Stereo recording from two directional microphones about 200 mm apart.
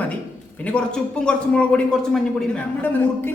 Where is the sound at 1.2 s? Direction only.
5° left (ahead or behind).